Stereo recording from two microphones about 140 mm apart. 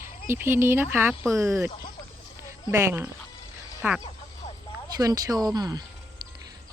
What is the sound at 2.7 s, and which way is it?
Speech, 15° right (ahead or behind).